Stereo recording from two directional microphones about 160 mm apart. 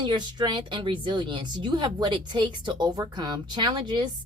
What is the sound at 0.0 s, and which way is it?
Speech, 30° right (ahead or behind).